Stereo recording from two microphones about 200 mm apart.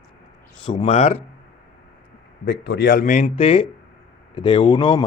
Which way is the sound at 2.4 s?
55° left (ahead or behind).